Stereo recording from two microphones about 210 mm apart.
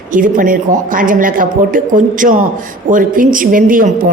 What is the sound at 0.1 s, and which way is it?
A woman's voice, 40° right (ahead or behind).